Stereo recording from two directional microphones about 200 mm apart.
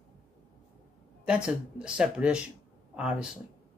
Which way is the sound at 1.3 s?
5° right (ahead or behind).